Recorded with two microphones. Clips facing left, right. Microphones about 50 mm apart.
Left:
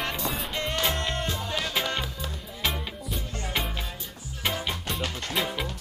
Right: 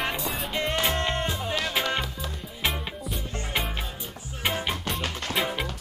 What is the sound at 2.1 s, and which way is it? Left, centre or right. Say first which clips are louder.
Music: right 1 dB; centre.